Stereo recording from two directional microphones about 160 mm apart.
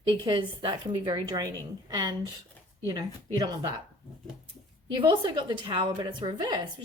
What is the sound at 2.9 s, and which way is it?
Speech, 25° right (ahead or behind).